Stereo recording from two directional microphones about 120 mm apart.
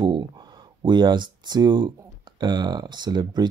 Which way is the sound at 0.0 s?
40° right (ahead or behind).